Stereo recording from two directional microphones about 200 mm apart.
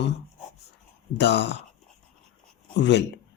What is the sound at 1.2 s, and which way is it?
Speech, 60° left (ahead or behind).